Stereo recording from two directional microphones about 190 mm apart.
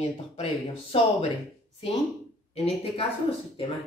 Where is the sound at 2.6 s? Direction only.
30° left (ahead or behind).